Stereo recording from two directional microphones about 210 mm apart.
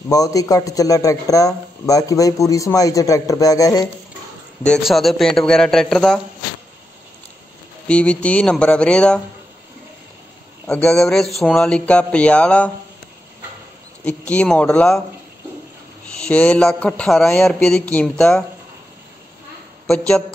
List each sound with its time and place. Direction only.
0.1 s speech: 15° left (ahead or behind)
4.6 s speech: centre (ahead or behind)
7.9 s speech: 5° left (ahead or behind)
10.7 s speech: 5° left (ahead or behind)
14.0 s speech: 5° left (ahead or behind)
16.2 s speech: 5° left (ahead or behind)
19.9 s speech: 5° left (ahead or behind)